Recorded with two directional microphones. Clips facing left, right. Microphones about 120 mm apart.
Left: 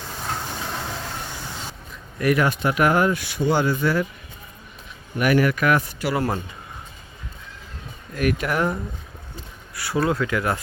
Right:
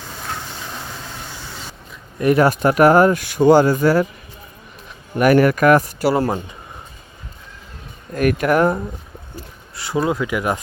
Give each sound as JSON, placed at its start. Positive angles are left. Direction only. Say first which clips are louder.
{"t": 2.1, "sound": "speech", "louder": "right 6 dB", "side_deg": -30}
{"t": 5.1, "sound": "speech", "louder": "right 6 dB", "side_deg": -45}
{"t": 8.1, "sound": "speech", "louder": "right 6 dB", "side_deg": -50}
{"t": 9.7, "sound": "speech", "louder": "right 2 dB", "side_deg": -20}